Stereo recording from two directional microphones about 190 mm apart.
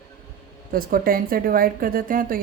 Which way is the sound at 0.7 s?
50° right (ahead or behind).